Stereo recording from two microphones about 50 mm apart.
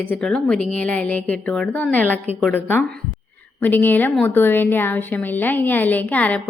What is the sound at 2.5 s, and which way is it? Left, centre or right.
A woman's voice, left.